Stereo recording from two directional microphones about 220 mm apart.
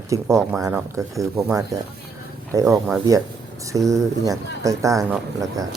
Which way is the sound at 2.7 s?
Centre (ahead or behind).